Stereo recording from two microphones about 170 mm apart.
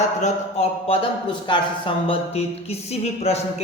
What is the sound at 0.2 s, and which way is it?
Speech, 40° left (ahead or behind).